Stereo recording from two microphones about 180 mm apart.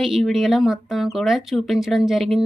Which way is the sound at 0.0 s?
Centre (ahead or behind).